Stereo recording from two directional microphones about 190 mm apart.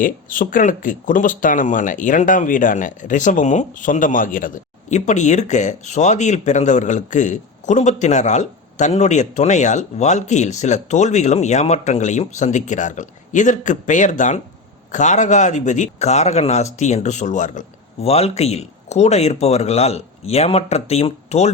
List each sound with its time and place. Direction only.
0.0 s speech: 45° left (ahead or behind)